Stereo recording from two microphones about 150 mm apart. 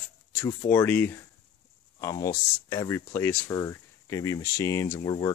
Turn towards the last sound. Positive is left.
turn(degrees=20)  # may be behind; listen again after turning